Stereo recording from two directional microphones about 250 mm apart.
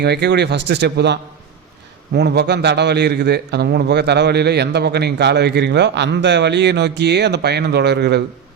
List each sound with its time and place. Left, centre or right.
0.0 s a man's voice: right